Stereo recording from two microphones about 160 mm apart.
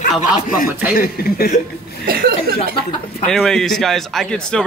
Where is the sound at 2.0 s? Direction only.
70° right (ahead or behind).